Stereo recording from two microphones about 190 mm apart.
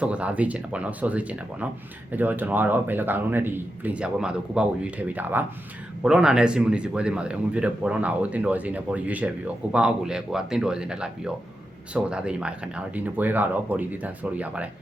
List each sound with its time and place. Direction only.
0.0 s a man's voice: 5° right (ahead or behind)